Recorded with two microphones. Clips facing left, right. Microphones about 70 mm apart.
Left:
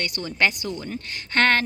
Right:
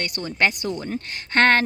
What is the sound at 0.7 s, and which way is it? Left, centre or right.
Speech, right.